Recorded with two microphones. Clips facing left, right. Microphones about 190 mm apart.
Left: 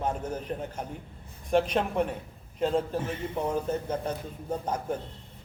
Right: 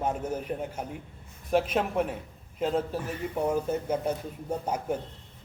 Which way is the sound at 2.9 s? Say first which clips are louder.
Left 1 dB; 25° left (ahead or behind).